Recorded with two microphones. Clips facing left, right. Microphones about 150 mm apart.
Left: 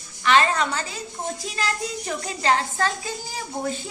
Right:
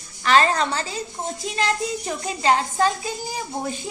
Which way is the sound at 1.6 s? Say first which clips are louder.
Right 5 dB; 20° right (ahead or behind).